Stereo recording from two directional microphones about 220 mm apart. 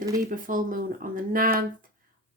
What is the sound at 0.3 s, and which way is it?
Speech, 40° right (ahead or behind).